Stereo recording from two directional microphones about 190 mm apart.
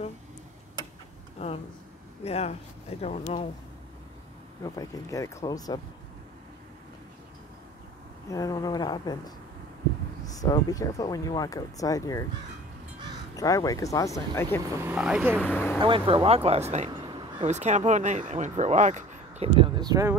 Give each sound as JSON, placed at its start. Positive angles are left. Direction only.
{"t": 1.4, "sound": "speech", "side_deg": 35}
{"t": 4.6, "sound": "speech", "side_deg": 15}
{"t": 8.3, "sound": "speech", "side_deg": 20}
{"t": 13.4, "sound": "speech", "side_deg": 20}
{"t": 14.8, "sound": "speech", "side_deg": -5}
{"t": 15.4, "sound": "speech", "side_deg": 10}
{"t": 15.8, "sound": "speech", "side_deg": -25}